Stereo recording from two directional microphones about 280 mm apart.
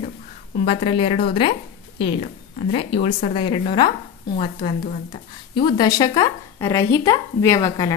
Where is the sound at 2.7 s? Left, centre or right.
Centre.